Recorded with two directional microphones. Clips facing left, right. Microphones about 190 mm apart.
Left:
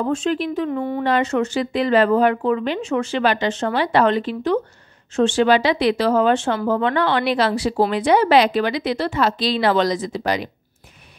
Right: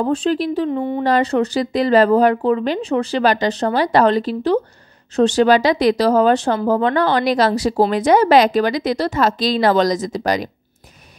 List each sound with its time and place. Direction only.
0.0 s speech: 35° right (ahead or behind)
0.7 s speech: 20° right (ahead or behind)
1.0 s speech: 35° right (ahead or behind)